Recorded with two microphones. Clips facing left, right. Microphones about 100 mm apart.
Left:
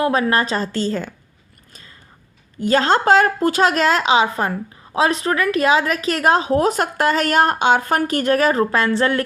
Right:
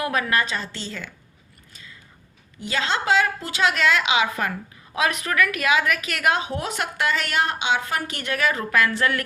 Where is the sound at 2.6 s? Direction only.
45° left (ahead or behind).